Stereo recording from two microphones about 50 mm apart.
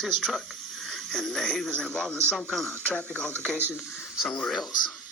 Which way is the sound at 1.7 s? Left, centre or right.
Centre.